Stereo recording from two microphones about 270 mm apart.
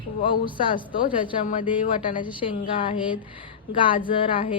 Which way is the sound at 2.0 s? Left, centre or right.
Centre.